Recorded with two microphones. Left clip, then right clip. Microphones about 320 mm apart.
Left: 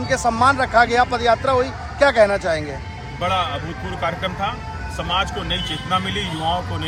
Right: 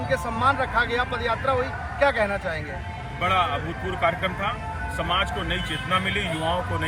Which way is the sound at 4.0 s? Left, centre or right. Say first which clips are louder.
Left 1 dB; centre.